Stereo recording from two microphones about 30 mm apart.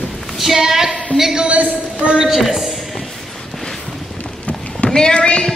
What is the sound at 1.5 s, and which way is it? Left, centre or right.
Speech, right.